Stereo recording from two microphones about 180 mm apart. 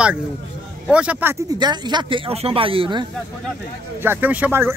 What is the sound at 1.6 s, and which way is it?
Speech, 25° right (ahead or behind).